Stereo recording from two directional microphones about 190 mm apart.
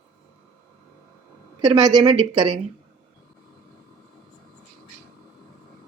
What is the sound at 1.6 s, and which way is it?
A woman's voice, 20° right (ahead or behind).